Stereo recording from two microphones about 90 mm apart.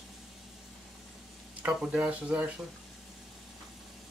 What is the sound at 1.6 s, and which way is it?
Speech, 10° right (ahead or behind).